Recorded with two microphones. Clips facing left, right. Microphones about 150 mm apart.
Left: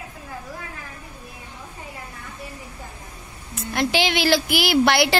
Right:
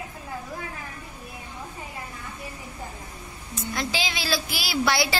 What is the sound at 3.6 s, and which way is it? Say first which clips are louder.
A woman's voice: left 7 dB; 65° left (ahead or behind).